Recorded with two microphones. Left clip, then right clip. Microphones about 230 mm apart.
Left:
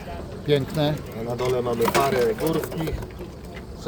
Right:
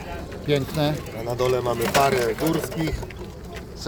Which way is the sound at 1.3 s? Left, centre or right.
Right.